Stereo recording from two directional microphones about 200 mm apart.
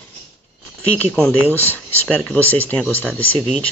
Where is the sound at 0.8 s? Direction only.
10° left (ahead or behind).